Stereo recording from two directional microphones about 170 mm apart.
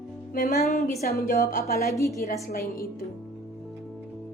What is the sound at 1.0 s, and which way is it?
Speech, 55° left (ahead or behind).